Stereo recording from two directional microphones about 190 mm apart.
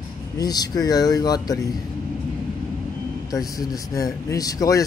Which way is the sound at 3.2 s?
20° left (ahead or behind).